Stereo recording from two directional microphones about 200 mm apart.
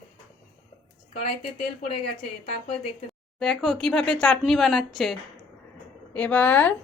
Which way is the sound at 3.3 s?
Centre (ahead or behind).